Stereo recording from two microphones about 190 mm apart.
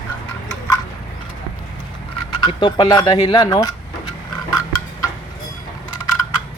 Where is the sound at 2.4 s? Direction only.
25° left (ahead or behind).